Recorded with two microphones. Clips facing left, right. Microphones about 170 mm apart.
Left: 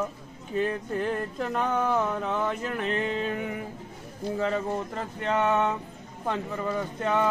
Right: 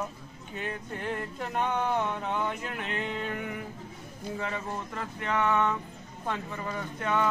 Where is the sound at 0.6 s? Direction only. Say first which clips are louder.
Left 8 dB; 40° left (ahead or behind).